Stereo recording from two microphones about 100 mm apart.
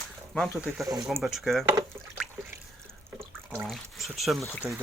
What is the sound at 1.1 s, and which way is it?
Speech, centre (ahead or behind).